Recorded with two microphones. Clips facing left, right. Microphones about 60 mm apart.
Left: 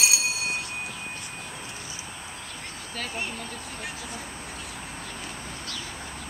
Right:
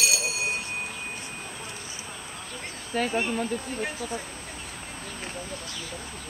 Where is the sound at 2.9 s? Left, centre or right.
Right.